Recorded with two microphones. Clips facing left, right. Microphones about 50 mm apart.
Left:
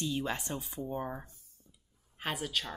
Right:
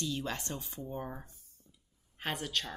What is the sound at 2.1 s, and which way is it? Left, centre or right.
Speech, centre.